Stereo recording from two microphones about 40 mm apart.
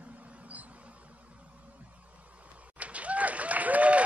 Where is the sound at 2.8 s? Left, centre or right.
Right.